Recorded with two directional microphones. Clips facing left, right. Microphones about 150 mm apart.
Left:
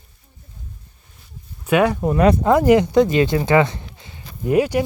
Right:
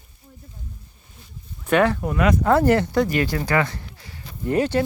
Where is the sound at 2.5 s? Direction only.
15° left (ahead or behind).